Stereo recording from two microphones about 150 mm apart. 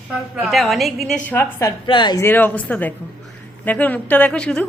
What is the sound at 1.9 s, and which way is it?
Speech, 30° left (ahead or behind).